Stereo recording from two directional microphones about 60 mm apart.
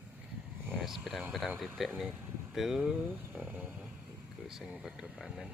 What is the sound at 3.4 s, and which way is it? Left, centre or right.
Speech, right.